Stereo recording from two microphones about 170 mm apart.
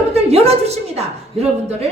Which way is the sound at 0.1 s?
40° right (ahead or behind).